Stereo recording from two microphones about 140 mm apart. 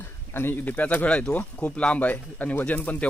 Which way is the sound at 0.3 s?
15° left (ahead or behind).